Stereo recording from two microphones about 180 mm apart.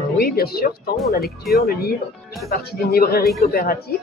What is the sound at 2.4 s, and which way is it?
Speech, 55° left (ahead or behind).